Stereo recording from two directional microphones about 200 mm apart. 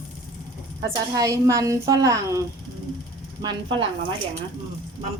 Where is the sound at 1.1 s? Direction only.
15° right (ahead or behind).